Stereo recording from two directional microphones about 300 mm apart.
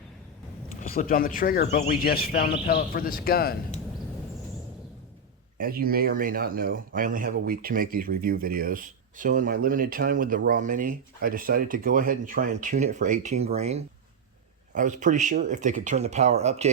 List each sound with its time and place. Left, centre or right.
0.8 s speech: left
5.5 s speech: right